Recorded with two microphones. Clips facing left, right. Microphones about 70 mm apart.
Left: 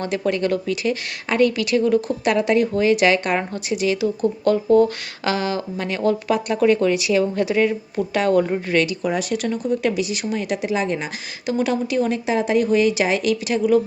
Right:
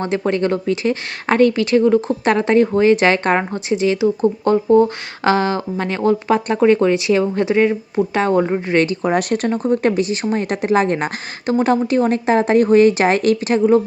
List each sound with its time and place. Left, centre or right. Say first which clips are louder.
0.0 s speech: right 3 dB; right
8.8 s speech: right 5 dB; right